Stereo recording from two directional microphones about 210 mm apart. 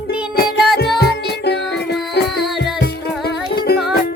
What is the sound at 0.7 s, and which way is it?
Music, 50° left (ahead or behind).